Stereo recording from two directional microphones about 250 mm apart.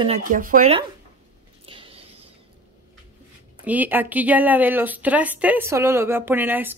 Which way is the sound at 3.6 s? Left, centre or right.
Centre.